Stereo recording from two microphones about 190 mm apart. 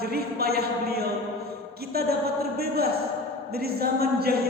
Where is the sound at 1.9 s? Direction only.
55° right (ahead or behind).